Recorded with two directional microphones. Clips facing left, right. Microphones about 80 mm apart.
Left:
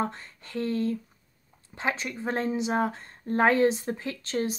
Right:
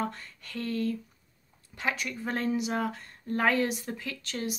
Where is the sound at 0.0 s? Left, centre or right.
Left.